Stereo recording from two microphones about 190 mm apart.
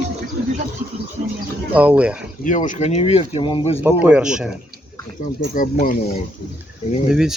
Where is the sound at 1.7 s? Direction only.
5° right (ahead or behind).